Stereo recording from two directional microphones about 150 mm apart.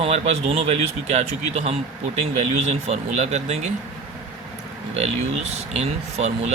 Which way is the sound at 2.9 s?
50° right (ahead or behind).